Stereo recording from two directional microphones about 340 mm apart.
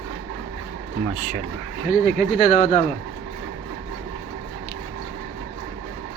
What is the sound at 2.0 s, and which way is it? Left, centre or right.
Speech, left.